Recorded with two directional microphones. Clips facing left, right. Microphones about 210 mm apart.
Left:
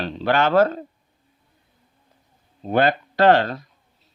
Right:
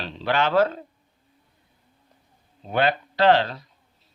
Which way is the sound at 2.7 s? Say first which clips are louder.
Left 4 dB; 45° left (ahead or behind).